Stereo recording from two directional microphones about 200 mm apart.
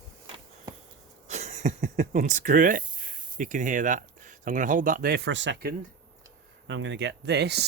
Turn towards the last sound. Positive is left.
turn(degrees=-55)  # may be behind; listen again after turning